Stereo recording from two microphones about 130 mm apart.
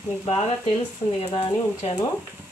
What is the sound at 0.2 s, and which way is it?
Speech, 45° left (ahead or behind).